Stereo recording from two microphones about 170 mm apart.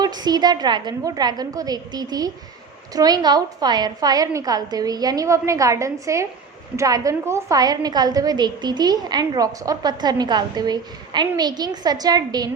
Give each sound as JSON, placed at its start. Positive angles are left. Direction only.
{"t": 0.0, "sound": "a woman's voice", "side_deg": -25}